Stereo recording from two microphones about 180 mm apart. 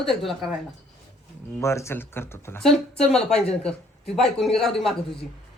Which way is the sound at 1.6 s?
15° left (ahead or behind).